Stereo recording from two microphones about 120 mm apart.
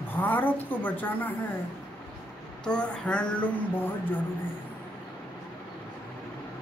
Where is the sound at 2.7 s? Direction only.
10° left (ahead or behind).